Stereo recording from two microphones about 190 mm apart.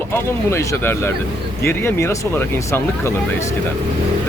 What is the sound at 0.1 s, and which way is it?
Speech, 15° left (ahead or behind).